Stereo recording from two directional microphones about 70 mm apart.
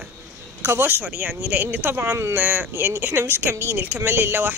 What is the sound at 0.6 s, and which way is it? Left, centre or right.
Speech, right.